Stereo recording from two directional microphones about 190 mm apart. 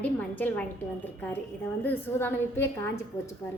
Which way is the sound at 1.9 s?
10° left (ahead or behind).